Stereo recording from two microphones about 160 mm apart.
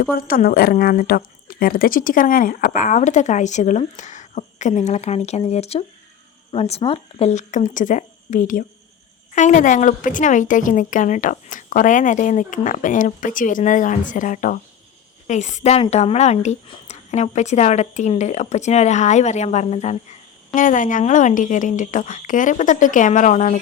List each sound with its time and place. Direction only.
0.1 s a woman's voice: 65° left (ahead or behind)